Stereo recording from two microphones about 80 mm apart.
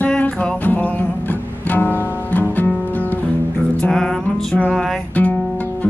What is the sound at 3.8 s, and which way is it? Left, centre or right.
Music, centre.